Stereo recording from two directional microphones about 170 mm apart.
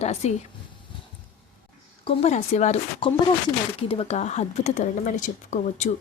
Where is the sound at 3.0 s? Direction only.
30° left (ahead or behind).